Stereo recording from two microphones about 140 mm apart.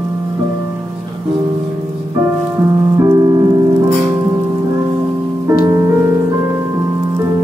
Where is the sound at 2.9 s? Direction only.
20° right (ahead or behind).